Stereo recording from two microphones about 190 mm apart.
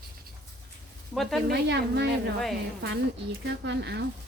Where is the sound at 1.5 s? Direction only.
60° right (ahead or behind).